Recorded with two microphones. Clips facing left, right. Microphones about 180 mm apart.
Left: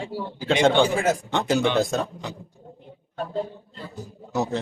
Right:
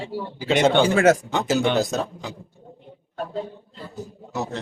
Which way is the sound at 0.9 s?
80° right.